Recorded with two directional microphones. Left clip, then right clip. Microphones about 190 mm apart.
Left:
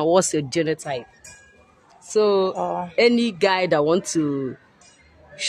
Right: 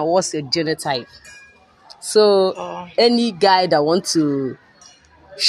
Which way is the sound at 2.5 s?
40° left (ahead or behind).